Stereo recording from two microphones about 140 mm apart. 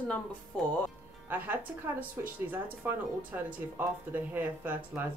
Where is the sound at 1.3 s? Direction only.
15° right (ahead or behind).